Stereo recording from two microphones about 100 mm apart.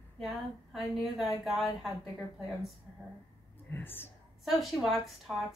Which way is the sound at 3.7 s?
20° left (ahead or behind).